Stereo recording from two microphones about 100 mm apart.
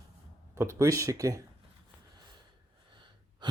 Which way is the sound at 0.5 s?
30° right (ahead or behind).